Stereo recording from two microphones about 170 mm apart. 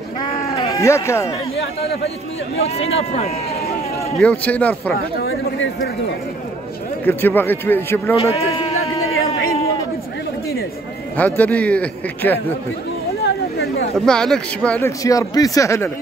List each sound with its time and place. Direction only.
0.7 s a man's voice: 15° left (ahead or behind)
2.6 s speech: 35° left (ahead or behind)
4.2 s a man's voice: 10° left (ahead or behind)
7.1 s a man's voice: 10° left (ahead or behind)
8.3 s a sound: 35° left (ahead or behind)
11.1 s a man's voice: 10° left (ahead or behind)
13.9 s speech: 5° left (ahead or behind)
14.9 s a man's voice: 20° left (ahead or behind)